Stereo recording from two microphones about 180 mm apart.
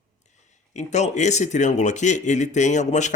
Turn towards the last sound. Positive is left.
turn(degrees=40)  # may be behind; listen again after turning